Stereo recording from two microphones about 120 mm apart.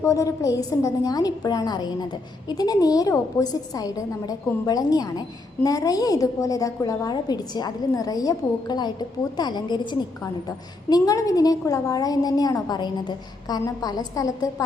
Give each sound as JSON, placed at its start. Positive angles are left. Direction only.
{"t": 0.0, "sound": "a woman's voice", "side_deg": 30}